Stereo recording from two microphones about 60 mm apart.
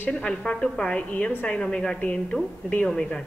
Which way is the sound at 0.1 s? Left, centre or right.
Centre.